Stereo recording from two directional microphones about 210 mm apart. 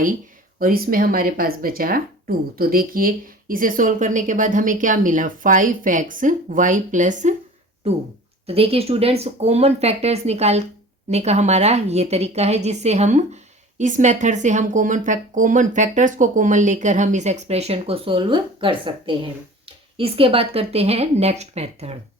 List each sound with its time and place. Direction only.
0.6 s a woman's voice: 45° right (ahead or behind)
8.4 s a woman's voice: 30° right (ahead or behind)